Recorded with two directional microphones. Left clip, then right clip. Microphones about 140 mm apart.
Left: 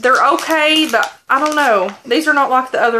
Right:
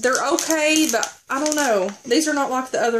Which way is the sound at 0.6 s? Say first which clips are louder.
Left 4 dB; 45° right (ahead or behind).